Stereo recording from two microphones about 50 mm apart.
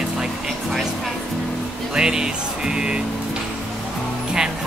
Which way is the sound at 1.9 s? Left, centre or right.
Centre.